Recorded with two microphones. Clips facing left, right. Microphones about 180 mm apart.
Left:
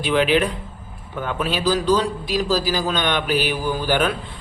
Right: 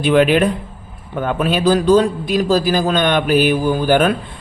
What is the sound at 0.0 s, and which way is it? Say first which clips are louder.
A man's voice: right 5 dB; 50° right (ahead or behind).